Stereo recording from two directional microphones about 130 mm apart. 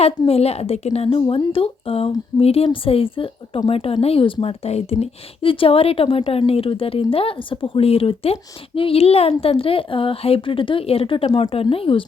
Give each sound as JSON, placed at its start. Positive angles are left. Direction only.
{"t": 0.0, "sound": "speech", "side_deg": 50}